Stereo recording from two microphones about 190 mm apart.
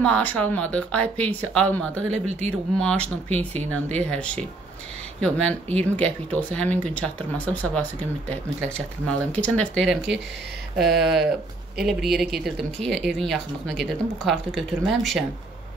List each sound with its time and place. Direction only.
0.0 s speech: 5° left (ahead or behind)
2.0 s speech: 35° right (ahead or behind)
2.8 s speech: 5° left (ahead or behind)